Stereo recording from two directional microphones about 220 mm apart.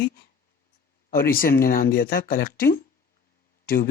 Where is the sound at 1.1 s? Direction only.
40° left (ahead or behind).